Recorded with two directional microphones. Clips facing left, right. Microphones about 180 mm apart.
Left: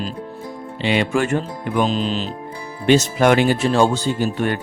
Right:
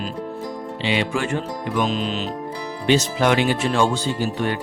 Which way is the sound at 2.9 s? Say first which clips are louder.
Left 4 dB; 50° left (ahead or behind).